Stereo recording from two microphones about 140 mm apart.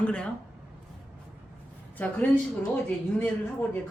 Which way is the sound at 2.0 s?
10° left (ahead or behind).